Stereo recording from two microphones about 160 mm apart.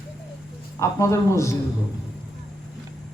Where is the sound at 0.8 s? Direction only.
20° left (ahead or behind).